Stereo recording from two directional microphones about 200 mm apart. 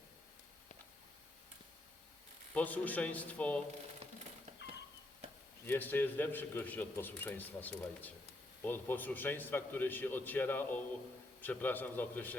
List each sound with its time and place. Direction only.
2.6 s a man's voice: 10° left (ahead or behind)
4.0 s a sound: 30° right (ahead or behind)
5.6 s a man's voice: 10° left (ahead or behind)